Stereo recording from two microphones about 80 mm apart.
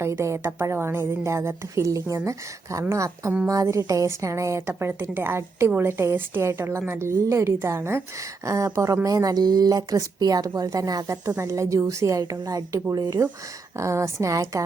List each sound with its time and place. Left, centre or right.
0.0 s a woman's voice: right
4.8 s a woman's voice: right